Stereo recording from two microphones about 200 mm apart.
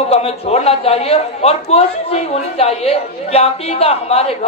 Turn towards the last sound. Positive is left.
turn(degrees=30)  # may be behind; listen again after turning